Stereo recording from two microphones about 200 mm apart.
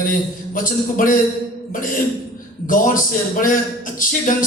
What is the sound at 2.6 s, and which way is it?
A man's voice, 40° left (ahead or behind).